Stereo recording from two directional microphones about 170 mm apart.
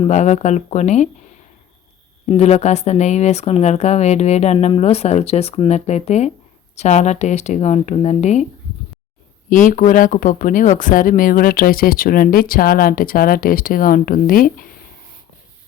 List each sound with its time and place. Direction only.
0.1 s speech: 45° left (ahead or behind)
2.3 s speech: 40° left (ahead or behind)
9.5 s speech: 50° left (ahead or behind)